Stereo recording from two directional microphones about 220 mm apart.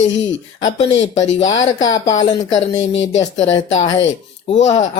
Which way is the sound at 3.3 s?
30° left (ahead or behind).